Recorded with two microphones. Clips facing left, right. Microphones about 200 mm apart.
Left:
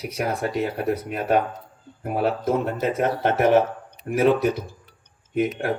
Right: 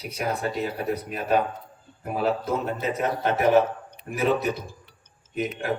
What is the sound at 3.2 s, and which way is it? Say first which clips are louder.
Speech: left 3 dB; 60° left (ahead or behind).